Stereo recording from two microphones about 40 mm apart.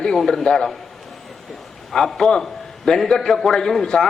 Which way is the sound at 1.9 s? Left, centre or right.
Centre.